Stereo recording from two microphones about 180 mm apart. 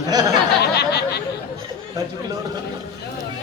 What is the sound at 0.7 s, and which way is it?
Speech, 65° left (ahead or behind).